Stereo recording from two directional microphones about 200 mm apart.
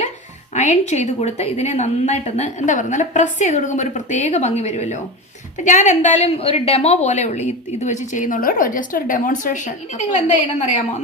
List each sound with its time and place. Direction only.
0.5 s a woman's voice: 35° left (ahead or behind)